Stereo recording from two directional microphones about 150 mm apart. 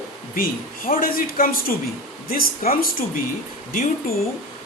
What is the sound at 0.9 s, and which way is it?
Speech, 70° left (ahead or behind).